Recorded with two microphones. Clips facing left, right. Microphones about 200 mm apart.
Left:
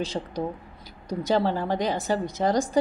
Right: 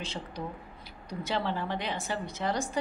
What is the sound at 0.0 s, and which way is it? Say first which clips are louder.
Speech: left 9 dB; 40° left (ahead or behind).